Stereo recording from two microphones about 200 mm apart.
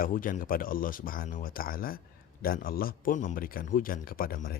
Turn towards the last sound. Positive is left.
turn(degrees=45)  # may be behind; listen again after turning